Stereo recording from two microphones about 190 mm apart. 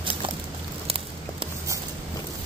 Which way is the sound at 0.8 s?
30° right (ahead or behind).